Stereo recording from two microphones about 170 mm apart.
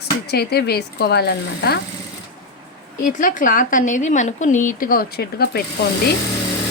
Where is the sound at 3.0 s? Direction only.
50° left (ahead or behind); by 5.6 s 65° left (ahead or behind).